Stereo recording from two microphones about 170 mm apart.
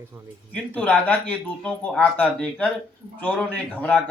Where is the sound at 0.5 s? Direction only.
10° left (ahead or behind).